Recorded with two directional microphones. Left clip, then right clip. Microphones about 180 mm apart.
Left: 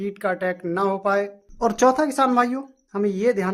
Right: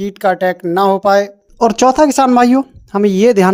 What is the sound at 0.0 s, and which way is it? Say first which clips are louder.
Speech: right 10 dB; 35° right (ahead or behind).